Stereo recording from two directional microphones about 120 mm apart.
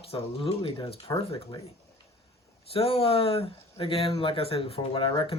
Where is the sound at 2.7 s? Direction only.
50° left (ahead or behind).